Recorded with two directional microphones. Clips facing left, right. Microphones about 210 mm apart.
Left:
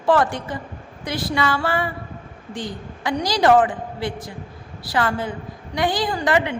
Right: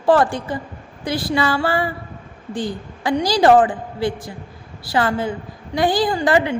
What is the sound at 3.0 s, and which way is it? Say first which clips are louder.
A woman's voice: right 3 dB; 30° right (ahead or behind).